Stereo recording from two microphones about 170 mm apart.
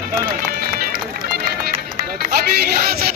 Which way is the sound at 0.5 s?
60° right (ahead or behind).